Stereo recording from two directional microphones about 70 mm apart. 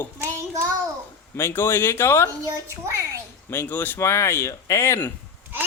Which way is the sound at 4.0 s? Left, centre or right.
Left.